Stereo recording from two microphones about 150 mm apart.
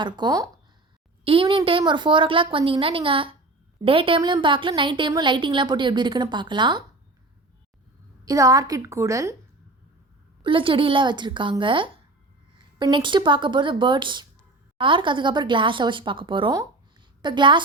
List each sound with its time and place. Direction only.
0.0 s a woman's voice: 30° right (ahead or behind)
1.2 s a woman's voice: 35° right (ahead or behind)
8.2 s a woman's voice: 25° right (ahead or behind)
10.4 s a woman's voice: 35° right (ahead or behind)